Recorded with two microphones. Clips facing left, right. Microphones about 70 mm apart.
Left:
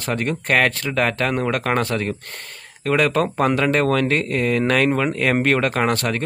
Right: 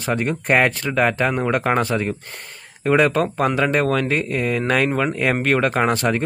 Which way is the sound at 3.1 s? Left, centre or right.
Centre.